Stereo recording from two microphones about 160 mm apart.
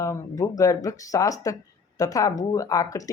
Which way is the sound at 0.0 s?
20° left (ahead or behind).